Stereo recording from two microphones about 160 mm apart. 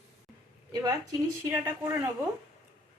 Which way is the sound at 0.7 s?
25° right (ahead or behind).